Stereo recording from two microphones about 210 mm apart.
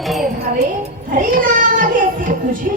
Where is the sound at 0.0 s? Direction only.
Centre (ahead or behind).